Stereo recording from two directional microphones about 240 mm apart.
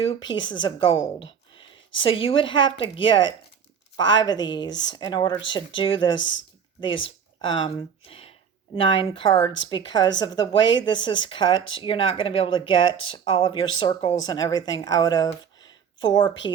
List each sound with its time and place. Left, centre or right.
0.1 s a woman's voice: centre
6.1 s speech: left
6.8 s a woman's voice: centre